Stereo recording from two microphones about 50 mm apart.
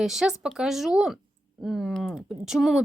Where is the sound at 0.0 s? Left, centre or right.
Centre.